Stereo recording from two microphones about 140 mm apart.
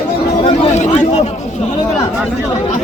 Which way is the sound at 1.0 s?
50° left (ahead or behind).